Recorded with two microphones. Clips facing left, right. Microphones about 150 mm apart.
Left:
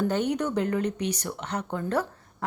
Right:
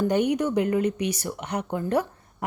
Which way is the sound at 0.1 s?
10° right (ahead or behind).